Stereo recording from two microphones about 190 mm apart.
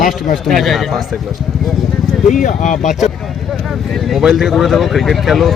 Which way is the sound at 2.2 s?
40° left (ahead or behind).